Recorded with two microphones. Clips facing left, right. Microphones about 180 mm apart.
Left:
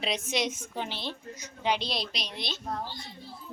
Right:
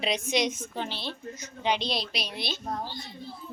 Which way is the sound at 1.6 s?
5° left (ahead or behind).